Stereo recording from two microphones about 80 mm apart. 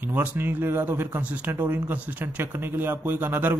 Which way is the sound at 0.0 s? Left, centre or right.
Right.